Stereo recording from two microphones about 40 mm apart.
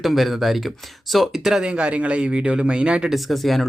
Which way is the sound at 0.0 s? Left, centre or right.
Centre.